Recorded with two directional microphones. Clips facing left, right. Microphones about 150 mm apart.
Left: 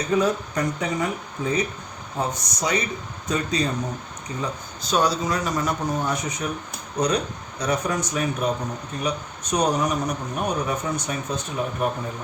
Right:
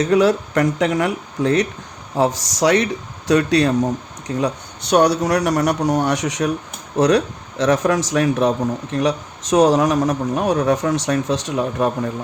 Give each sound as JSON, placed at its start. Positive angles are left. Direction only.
{"t": 0.0, "sound": "a man's voice", "side_deg": -90}
{"t": 4.4, "sound": "a man's voice", "side_deg": -75}